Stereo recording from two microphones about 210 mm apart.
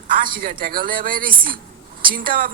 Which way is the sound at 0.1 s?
45° right (ahead or behind).